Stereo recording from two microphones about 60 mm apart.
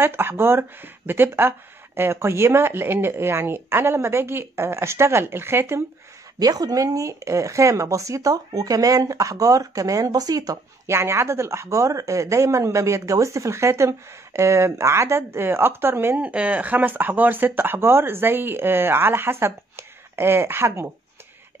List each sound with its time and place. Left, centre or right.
0.0 s speech: right
6.4 s speech: right
10.9 s speech: right
16.2 s speech: right